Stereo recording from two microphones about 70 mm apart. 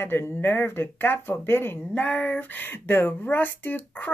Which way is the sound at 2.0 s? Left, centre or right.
Left.